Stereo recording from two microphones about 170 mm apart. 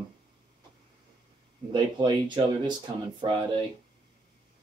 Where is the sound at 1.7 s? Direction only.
25° right (ahead or behind).